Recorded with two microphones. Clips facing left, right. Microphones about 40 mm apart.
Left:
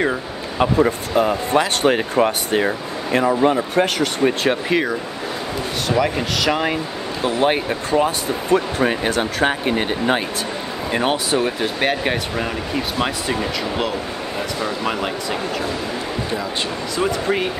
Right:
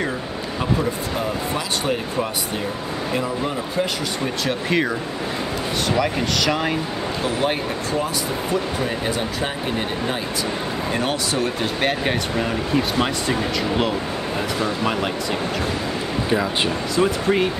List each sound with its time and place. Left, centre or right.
0.6 s speech: left
3.4 s speech: left
4.6 s speech: centre
7.2 s speech: left
8.5 s speech: left
10.9 s speech: left; by 15.0 s centre
16.9 s speech: centre